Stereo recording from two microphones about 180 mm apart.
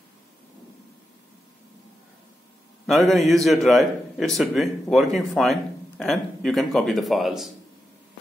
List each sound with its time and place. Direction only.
2.9 s speech: centre (ahead or behind)